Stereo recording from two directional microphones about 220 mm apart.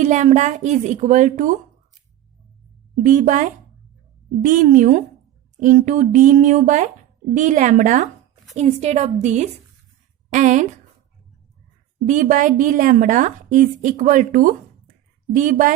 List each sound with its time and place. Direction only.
0.0 s a woman's voice: 30° right (ahead or behind)
3.0 s a woman's voice: 35° right (ahead or behind)
12.0 s a woman's voice: 35° right (ahead or behind)